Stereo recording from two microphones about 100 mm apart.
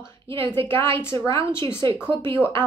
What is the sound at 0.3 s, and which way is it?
Speech, 25° left (ahead or behind).